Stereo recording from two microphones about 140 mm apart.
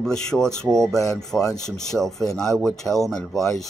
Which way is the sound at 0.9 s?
25° left (ahead or behind).